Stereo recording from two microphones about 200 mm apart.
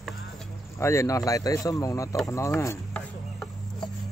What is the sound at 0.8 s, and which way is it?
Speech, 15° left (ahead or behind).